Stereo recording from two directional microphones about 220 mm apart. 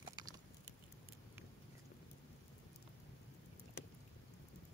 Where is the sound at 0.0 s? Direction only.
20° right (ahead or behind).